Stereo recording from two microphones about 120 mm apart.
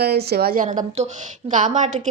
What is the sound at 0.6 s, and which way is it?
Speech, 90° right.